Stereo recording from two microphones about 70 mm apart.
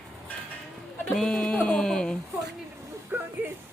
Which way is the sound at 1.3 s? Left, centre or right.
Centre.